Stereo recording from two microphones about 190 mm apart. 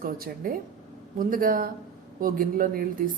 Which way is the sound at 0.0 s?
50° right (ahead or behind).